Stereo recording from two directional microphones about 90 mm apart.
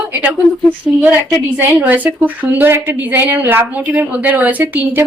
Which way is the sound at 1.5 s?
20° right (ahead or behind).